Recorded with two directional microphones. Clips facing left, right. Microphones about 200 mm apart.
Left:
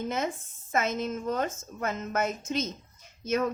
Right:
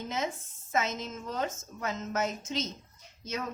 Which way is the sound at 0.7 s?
55° left (ahead or behind).